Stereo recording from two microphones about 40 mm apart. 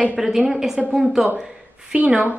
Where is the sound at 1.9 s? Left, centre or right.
Right.